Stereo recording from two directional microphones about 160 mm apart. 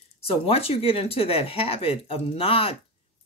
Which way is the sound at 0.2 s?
35° left (ahead or behind).